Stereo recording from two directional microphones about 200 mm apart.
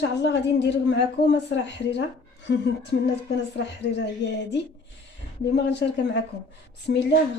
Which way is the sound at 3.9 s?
60° left (ahead or behind).